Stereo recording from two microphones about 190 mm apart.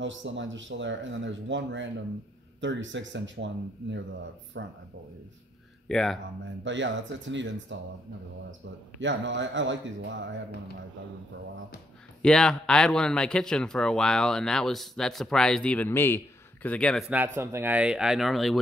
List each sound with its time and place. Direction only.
0.0 s speech: 75° right (ahead or behind)
5.9 s speech: centre (ahead or behind)
6.6 s speech: 75° right (ahead or behind)
9.0 s speech: 75° right (ahead or behind)
12.2 s a man's voice: 5° left (ahead or behind)
17.4 s a man's voice: 15° right (ahead or behind)